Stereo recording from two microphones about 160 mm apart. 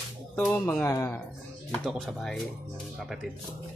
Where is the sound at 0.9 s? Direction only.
20° left (ahead or behind).